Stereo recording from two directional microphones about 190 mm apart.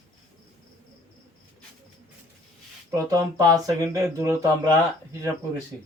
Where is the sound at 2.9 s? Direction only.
15° right (ahead or behind).